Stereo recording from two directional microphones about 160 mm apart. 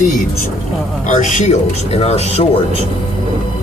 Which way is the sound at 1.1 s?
50° left (ahead or behind).